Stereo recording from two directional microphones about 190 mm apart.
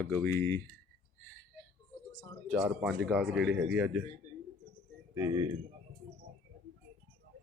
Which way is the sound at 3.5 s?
65° right (ahead or behind).